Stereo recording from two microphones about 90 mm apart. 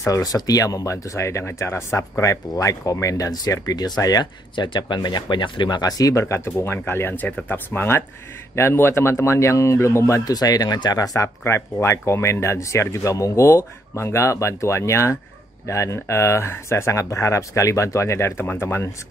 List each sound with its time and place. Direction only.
0.0 s speech: 40° left (ahead or behind)
4.6 s speech: 60° left (ahead or behind); by 10.3 s 35° left (ahead or behind)
10.3 s speech: 45° left (ahead or behind)
11.4 s speech: 30° left (ahead or behind)